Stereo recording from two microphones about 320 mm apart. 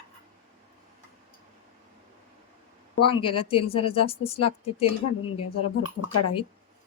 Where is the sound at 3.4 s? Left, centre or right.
Centre.